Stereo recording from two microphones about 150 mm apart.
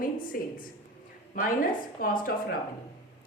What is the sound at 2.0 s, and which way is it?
Speech, 70° left (ahead or behind).